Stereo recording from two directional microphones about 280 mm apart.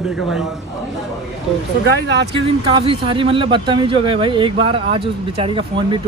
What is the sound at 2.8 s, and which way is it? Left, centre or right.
Speech, centre.